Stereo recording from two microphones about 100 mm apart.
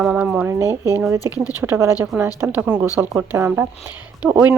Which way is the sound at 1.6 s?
30° right (ahead or behind).